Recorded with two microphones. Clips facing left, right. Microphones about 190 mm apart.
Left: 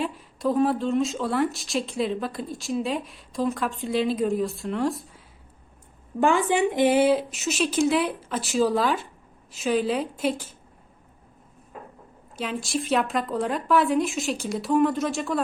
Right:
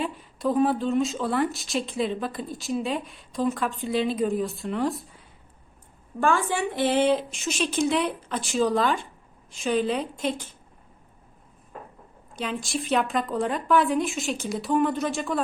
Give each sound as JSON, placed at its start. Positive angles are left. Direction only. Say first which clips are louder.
{"t": 0.0, "sound": "speech", "louder": "left 1 dB", "side_deg": 0}
{"t": 6.1, "sound": "speech", "louder": "left 3 dB", "side_deg": 20}
{"t": 12.4, "sound": "speech", "louder": "left 1 dB", "side_deg": 0}